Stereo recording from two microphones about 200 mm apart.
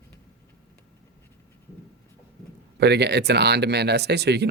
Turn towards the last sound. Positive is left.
turn(degrees=-55)  # may be behind; listen again after turning